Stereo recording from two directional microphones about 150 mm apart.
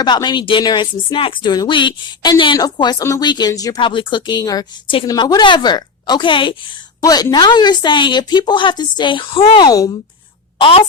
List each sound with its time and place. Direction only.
0.0 s a woman's voice: 30° left (ahead or behind)
3.8 s a woman's voice: 35° left (ahead or behind)
10.6 s speech: 40° left (ahead or behind)